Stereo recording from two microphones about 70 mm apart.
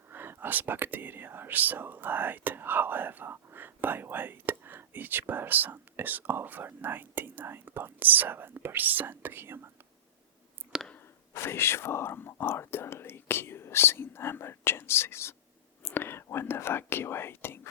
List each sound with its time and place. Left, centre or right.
0.1 s speech: right
10.7 s a sound: centre
11.3 s speech: left